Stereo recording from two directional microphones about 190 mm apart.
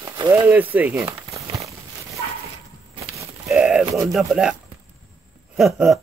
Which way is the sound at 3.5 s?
5° right (ahead or behind).